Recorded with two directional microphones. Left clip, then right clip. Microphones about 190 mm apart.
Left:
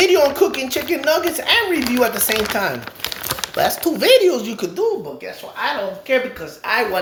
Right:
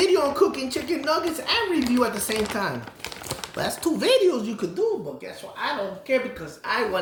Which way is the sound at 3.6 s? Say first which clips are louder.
Left 8 dB; 35° right (ahead or behind).